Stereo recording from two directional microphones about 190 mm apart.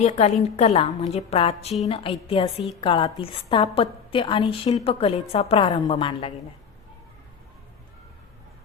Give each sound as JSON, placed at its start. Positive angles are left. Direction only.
{"t": 0.0, "sound": "a woman's voice", "side_deg": 35}